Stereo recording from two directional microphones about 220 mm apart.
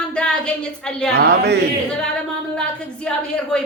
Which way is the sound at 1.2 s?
50° right (ahead or behind).